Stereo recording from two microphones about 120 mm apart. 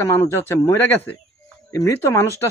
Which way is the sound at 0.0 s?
20° left (ahead or behind).